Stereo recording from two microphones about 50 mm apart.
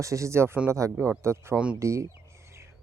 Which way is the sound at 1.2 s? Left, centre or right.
Right.